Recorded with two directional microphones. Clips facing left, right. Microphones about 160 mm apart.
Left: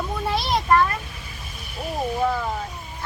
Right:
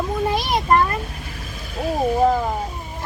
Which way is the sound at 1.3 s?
90° right.